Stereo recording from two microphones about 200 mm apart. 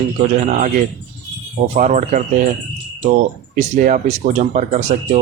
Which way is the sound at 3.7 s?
40° right (ahead or behind).